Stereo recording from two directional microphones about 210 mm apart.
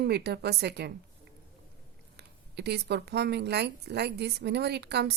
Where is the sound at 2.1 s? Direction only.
50° right (ahead or behind).